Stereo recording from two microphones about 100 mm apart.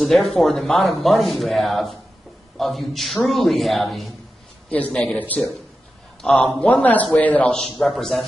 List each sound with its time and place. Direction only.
0.0 s speech: centre (ahead or behind)
4.9 s a man's voice: 10° left (ahead or behind)